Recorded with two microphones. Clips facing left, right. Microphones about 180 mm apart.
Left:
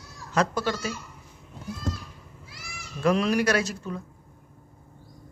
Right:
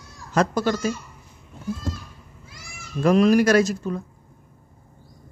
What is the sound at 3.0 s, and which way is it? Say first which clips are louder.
Speech: right 6 dB; 45° right (ahead or behind).